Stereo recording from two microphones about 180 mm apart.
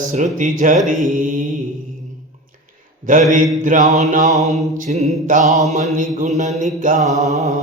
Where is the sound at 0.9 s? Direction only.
45° right (ahead or behind).